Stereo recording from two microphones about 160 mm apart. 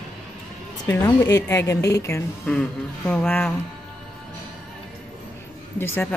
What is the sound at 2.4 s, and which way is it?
A woman's voice, 5° left (ahead or behind).